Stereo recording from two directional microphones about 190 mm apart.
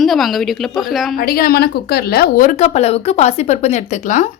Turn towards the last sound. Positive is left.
turn(degrees=40)  # may be behind; listen again after turning